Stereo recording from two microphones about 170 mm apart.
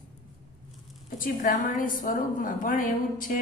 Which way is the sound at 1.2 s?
55° left (ahead or behind).